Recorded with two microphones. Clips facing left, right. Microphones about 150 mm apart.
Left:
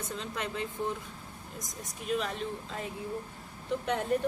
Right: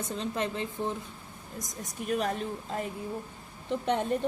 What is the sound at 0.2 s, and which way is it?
Speech, 30° right (ahead or behind).